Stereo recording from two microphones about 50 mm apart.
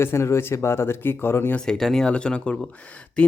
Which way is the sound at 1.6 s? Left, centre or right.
Centre.